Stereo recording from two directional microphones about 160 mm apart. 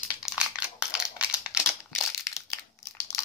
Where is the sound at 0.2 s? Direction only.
5° right (ahead or behind).